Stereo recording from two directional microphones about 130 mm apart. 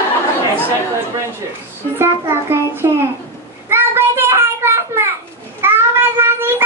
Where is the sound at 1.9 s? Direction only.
20° right (ahead or behind).